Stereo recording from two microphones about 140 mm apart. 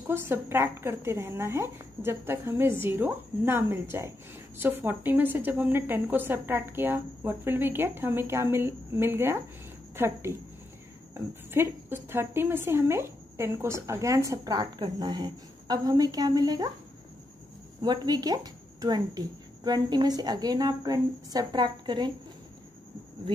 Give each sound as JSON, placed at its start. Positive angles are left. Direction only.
{"t": 0.0, "sound": "a woman's voice", "side_deg": -15}
{"t": 17.8, "sound": "a woman's voice", "side_deg": -30}